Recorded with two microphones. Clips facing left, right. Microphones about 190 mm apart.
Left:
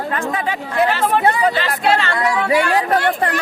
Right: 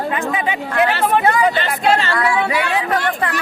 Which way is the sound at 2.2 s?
45° left (ahead or behind).